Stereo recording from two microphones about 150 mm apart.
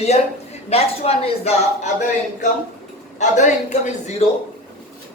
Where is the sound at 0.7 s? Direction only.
45° left (ahead or behind).